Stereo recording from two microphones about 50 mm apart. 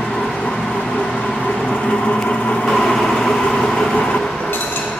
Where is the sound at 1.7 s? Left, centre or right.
Left.